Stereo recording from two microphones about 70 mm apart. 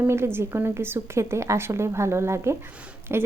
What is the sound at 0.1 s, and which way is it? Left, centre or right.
A woman's voice, right.